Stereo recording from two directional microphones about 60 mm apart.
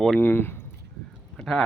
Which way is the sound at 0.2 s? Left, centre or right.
Left.